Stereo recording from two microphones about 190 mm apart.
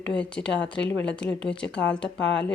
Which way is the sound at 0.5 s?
70° left (ahead or behind).